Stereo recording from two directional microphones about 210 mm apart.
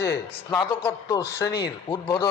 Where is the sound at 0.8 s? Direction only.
15° left (ahead or behind).